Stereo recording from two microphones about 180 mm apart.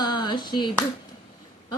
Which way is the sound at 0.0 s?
25° left (ahead or behind).